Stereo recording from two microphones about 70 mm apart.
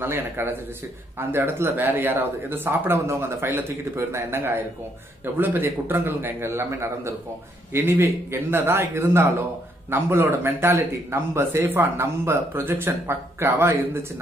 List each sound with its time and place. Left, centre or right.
0.0 s speech: right